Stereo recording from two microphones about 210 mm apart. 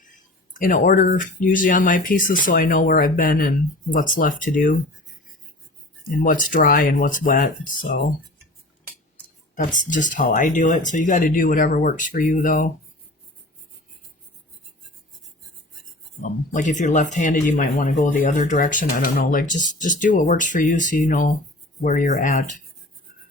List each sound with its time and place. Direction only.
0.6 s speech: 40° left (ahead or behind)
6.1 s speech: 40° left (ahead or behind)
9.7 s speech: 35° left (ahead or behind)
16.2 s speech: 35° left (ahead or behind)